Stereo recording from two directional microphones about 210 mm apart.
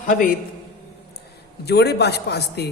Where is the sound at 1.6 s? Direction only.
50° left (ahead or behind).